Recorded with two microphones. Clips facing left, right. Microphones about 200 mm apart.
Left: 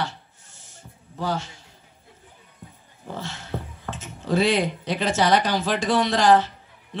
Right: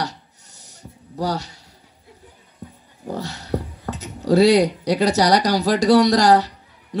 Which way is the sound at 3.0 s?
40° right (ahead or behind).